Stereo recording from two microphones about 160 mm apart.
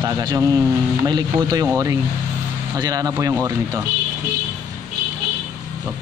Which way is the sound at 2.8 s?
20° right (ahead or behind).